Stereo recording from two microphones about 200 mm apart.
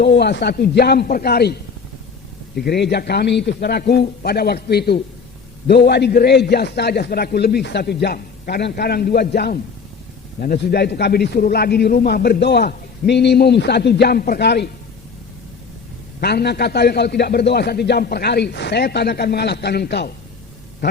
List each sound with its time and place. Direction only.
0.0 s a man's voice: 55° left (ahead or behind)
2.6 s a man's voice: 55° left (ahead or behind)
16.2 s a man's voice: 55° left (ahead or behind)